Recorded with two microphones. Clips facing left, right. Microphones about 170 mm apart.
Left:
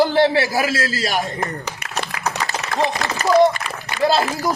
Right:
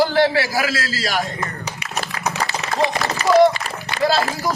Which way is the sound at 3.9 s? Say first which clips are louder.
Left 1 dB; 50° left (ahead or behind).